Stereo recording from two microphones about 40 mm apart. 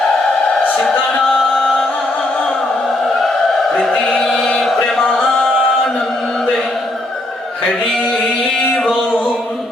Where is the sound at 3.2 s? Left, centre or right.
Centre.